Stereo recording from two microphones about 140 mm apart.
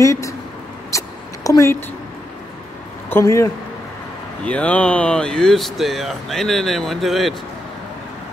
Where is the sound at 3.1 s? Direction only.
20° left (ahead or behind).